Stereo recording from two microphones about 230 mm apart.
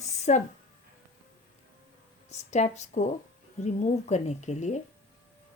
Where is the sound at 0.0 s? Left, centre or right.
Left.